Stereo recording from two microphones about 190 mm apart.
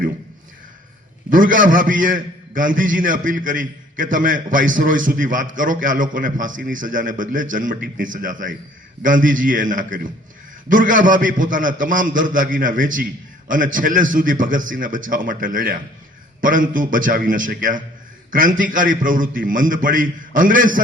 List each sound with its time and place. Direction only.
1.3 s a man's voice: 45° right (ahead or behind)